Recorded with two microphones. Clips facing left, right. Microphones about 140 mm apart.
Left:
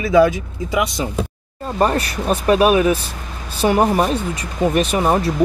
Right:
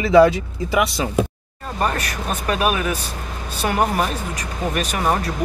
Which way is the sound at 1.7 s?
30° left (ahead or behind).